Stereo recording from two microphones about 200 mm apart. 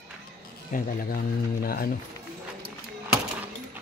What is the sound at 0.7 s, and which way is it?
A man's voice, 45° left (ahead or behind).